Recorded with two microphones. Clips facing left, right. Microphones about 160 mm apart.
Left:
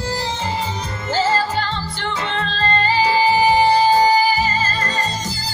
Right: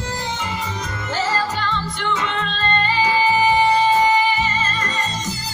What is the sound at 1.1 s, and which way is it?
Music, 30° left (ahead or behind).